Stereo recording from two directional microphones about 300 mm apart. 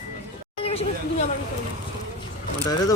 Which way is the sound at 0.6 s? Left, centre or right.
Centre.